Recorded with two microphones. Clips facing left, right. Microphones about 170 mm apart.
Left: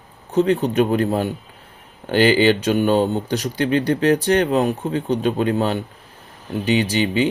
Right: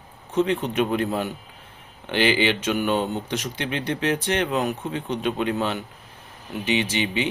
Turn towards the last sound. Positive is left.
turn(degrees=40)  # may be behind; listen again after turning